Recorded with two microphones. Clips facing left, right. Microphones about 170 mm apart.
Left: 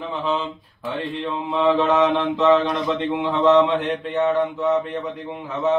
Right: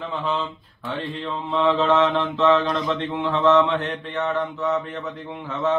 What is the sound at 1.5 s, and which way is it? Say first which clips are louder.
Mantra: left 1 dB; 15° left (ahead or behind).